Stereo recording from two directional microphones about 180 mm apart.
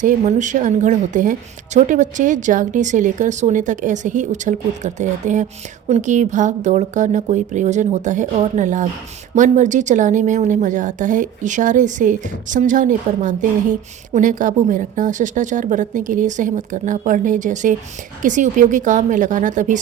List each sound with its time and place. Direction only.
0.0 s a woman's voice: 45° right (ahead or behind)